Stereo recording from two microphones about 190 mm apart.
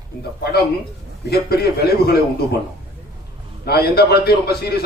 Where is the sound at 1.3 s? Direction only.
55° left (ahead or behind).